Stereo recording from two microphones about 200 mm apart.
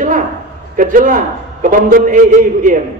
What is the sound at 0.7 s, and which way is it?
A man's voice, 40° right (ahead or behind).